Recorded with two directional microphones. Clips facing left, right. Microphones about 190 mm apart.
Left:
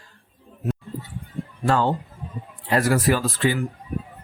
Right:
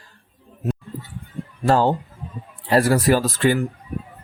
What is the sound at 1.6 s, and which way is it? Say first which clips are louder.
Speech: right 3 dB; 35° right (ahead or behind).